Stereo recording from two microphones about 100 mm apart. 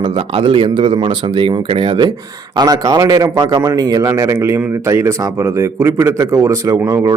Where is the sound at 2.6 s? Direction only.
40° right (ahead or behind).